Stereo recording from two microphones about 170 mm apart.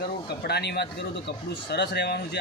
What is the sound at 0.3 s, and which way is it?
A man's voice, 70° left (ahead or behind).